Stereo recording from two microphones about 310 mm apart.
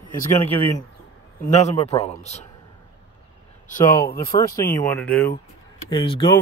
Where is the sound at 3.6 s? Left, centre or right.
Left.